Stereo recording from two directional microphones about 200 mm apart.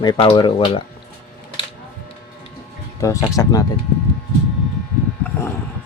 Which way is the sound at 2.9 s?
15° left (ahead or behind).